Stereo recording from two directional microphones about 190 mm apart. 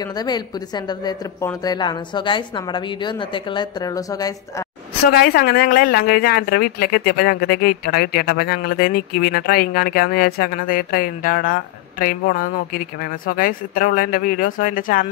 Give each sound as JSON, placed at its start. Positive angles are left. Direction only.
{"t": 0.0, "sound": "speech", "side_deg": 20}
{"t": 5.0, "sound": "speech", "side_deg": 55}